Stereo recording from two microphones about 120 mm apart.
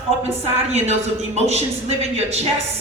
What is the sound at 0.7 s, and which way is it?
A woman's voice, 65° right (ahead or behind).